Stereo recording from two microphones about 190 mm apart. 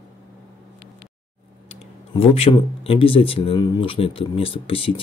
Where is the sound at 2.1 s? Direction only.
30° left (ahead or behind).